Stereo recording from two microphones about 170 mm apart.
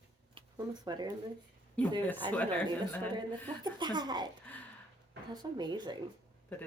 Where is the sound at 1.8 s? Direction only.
10° left (ahead or behind).